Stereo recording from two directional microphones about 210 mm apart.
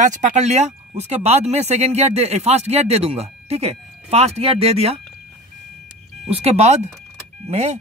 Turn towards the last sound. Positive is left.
turn(degrees=-30)  # may be behind; listen again after turning